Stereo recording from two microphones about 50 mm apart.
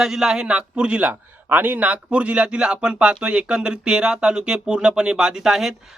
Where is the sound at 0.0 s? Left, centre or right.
Centre.